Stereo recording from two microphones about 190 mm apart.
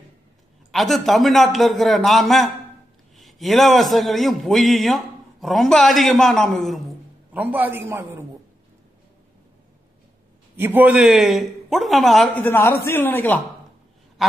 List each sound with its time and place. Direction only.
0.7 s a man's voice: centre (ahead or behind)
7.3 s a man's voice: 10° right (ahead or behind)
10.5 s a man's voice: 10° right (ahead or behind)
12.4 s a man's voice: 10° left (ahead or behind)